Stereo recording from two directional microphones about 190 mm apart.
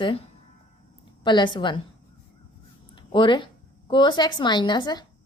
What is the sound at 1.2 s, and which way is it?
Speech, 25° left (ahead or behind).